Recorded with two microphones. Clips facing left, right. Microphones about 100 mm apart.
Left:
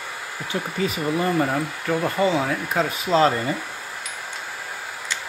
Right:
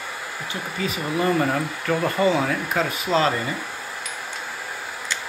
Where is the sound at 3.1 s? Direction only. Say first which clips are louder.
Left 2 dB; 5° left (ahead or behind).